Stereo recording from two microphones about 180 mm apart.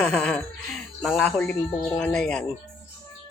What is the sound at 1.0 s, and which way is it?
Speech, 5° left (ahead or behind).